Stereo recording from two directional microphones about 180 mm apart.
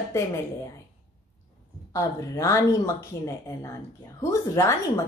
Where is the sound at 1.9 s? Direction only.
15° left (ahead or behind).